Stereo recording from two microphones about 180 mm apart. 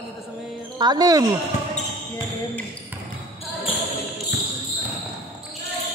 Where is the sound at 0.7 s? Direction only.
20° right (ahead or behind).